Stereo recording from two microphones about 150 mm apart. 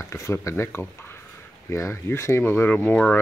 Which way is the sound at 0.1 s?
20° left (ahead or behind).